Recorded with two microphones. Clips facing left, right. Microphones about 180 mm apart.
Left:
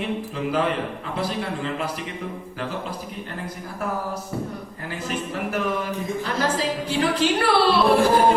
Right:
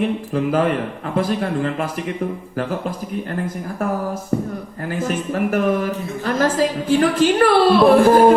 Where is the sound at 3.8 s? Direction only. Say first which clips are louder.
Right 5 dB; 50° right (ahead or behind).